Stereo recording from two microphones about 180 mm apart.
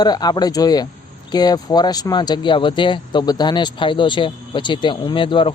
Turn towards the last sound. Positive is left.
turn(degrees=30)  # may be behind; listen again after turning